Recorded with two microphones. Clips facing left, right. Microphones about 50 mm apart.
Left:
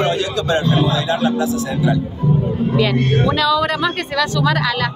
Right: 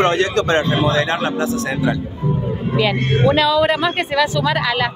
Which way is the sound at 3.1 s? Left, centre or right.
Right.